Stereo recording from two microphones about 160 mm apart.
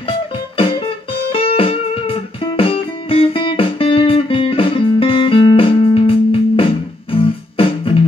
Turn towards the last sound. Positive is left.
turn(degrees=35)  # may be behind; listen again after turning